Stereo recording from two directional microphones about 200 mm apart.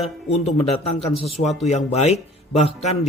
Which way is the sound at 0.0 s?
35° left (ahead or behind).